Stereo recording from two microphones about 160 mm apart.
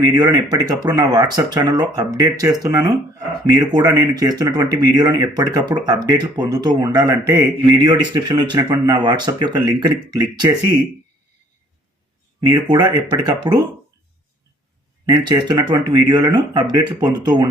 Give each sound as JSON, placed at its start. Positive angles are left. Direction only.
{"t": 0.0, "sound": "speech", "side_deg": -25}
{"t": 12.9, "sound": "speech", "side_deg": -30}
{"t": 15.0, "sound": "speech", "side_deg": -30}